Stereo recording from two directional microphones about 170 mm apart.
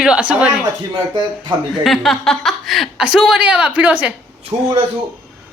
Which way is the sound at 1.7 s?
Centre (ahead or behind).